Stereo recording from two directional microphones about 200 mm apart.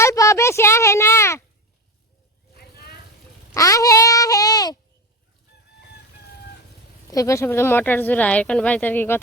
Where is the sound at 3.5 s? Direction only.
15° left (ahead or behind).